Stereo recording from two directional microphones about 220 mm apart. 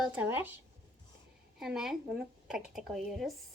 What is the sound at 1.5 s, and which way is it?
A woman's voice, centre (ahead or behind).